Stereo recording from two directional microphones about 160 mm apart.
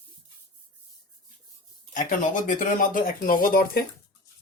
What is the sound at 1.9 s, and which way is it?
Speech, 55° left (ahead or behind).